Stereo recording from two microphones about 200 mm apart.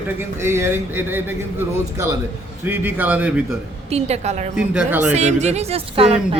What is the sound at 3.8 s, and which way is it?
Speech, 30° right (ahead or behind).